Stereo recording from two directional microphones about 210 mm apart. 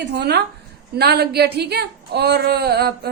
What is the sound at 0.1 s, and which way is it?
Speech, 55° right (ahead or behind).